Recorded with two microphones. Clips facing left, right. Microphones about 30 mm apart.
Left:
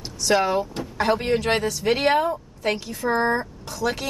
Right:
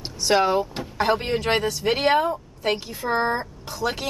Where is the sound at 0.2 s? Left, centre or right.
Centre.